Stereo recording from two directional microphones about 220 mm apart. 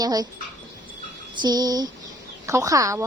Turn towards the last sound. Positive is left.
turn(degrees=-15)  # may be behind; listen again after turning